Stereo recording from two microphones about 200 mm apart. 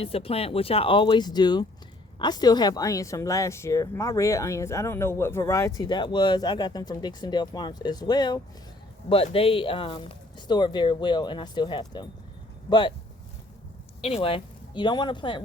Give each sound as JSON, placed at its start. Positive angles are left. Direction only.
{"t": 0.0, "sound": "speech", "side_deg": 30}
{"t": 14.0, "sound": "speech", "side_deg": 30}